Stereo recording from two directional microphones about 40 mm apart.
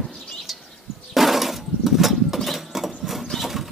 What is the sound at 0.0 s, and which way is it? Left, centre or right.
Bird, centre.